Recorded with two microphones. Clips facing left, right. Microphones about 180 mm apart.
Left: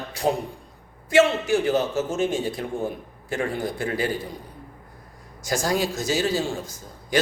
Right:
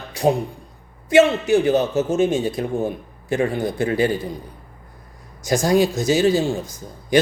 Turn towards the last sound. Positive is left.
turn(degrees=-15)  # may be behind; listen again after turning